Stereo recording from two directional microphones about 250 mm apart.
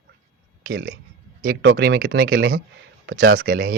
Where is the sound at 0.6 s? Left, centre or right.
Right.